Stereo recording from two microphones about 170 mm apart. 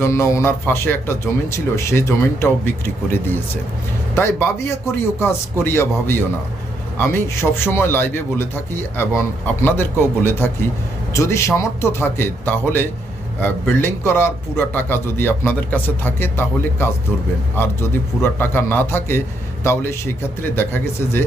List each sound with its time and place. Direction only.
0.0 s a man's voice: 15° left (ahead or behind)